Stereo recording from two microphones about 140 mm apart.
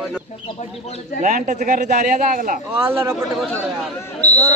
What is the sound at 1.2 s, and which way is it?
A man's voice, 65° right (ahead or behind).